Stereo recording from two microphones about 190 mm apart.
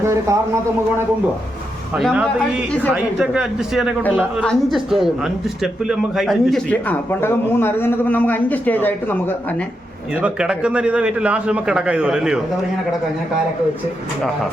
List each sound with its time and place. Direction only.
0.0 s a man's voice: 15° right (ahead or behind)
2.0 s a man's voice: centre (ahead or behind)
10.2 s a man's voice: 5° right (ahead or behind)